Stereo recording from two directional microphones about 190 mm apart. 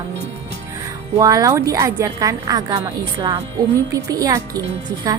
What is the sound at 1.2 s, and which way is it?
A woman's voice, 20° right (ahead or behind).